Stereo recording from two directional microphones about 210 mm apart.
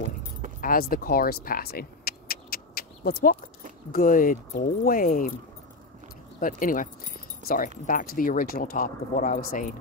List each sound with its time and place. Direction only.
0.6 s a sound: 45° left (ahead or behind)
3.9 s speech: 40° left (ahead or behind)
6.4 s speech: 40° left (ahead or behind)